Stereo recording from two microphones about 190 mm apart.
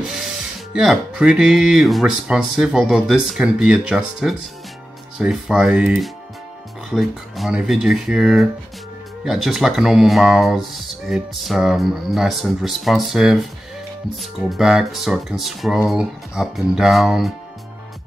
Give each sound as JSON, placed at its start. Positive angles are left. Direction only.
{"t": 0.7, "sound": "speech", "side_deg": -5}